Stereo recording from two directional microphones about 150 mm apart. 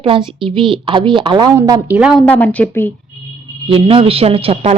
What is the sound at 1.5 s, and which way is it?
Speech, 20° right (ahead or behind).